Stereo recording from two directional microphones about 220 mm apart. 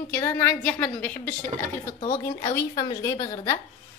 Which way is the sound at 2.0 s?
25° left (ahead or behind).